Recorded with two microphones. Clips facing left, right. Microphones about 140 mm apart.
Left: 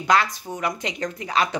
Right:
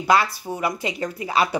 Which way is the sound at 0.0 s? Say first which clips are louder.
Right 1 dB; 5° right (ahead or behind).